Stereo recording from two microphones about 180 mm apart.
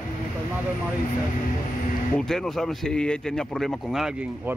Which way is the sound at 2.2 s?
Centre (ahead or behind).